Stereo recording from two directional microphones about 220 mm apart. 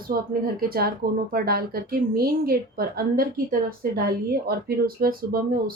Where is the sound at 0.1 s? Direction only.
45° right (ahead or behind).